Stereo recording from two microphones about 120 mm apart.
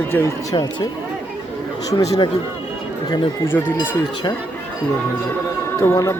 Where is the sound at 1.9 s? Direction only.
35° left (ahead or behind).